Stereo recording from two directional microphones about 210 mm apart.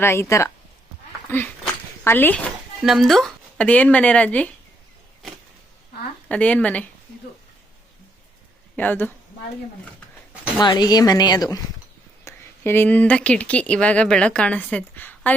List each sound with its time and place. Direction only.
0.0 s speech: 10° left (ahead or behind)
1.3 s a sound: 10° left (ahead or behind)
2.0 s speech: 10° left (ahead or behind)
6.2 s speech: 5° left (ahead or behind)
8.7 s speech: 10° left (ahead or behind)
10.6 s a woman's voice: 20° left (ahead or behind)